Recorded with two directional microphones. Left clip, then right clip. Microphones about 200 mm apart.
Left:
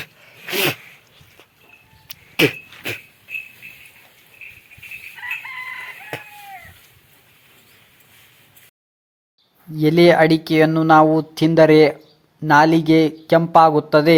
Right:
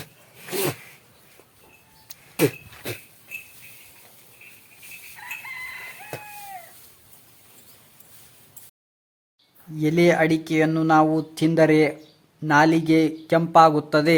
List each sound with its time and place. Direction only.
0.0 s a sound: centre (ahead or behind)
2.0 s cough: centre (ahead or behind)
6.1 s chicken: centre (ahead or behind)
9.8 s speech: 15° left (ahead or behind)